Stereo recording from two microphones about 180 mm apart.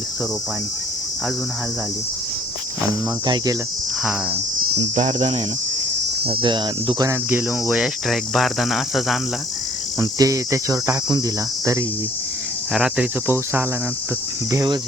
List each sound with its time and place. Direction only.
3.2 s cricket: 20° right (ahead or behind)
4.0 s cricket: centre (ahead or behind)
4.8 s cricket: 40° right (ahead or behind)
6.2 s cricket: 30° right (ahead or behind); by 9.1 s centre (ahead or behind)
10.0 s cricket: 20° right (ahead or behind)
12.7 s cricket: 5° right (ahead or behind); by 14.8 s 20° right (ahead or behind)